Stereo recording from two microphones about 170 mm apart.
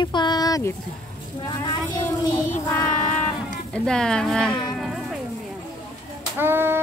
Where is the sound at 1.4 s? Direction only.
25° left (ahead or behind).